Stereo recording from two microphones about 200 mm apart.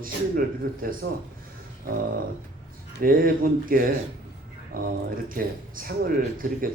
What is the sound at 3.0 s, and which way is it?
Speech, 45° right (ahead or behind).